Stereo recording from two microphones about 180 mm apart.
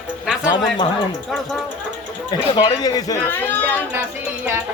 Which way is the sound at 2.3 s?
25° left (ahead or behind).